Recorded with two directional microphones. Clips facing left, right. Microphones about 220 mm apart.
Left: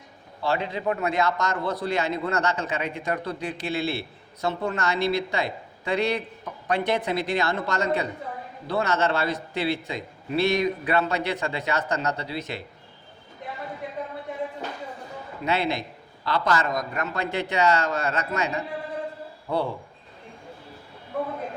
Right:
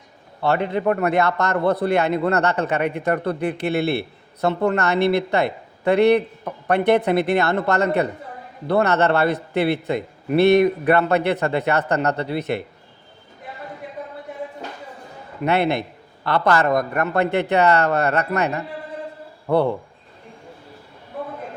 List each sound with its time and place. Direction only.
0.4 s a man's voice: 60° right (ahead or behind)
15.4 s a man's voice: 60° right (ahead or behind)